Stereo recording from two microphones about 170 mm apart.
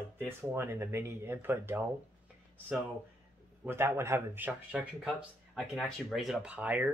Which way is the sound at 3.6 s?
15° right (ahead or behind).